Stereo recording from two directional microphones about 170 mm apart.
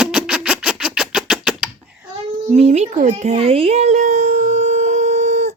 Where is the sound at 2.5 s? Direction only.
40° right (ahead or behind).